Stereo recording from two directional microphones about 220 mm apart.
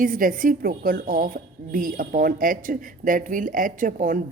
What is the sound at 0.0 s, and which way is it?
A woman's voice, 40° right (ahead or behind).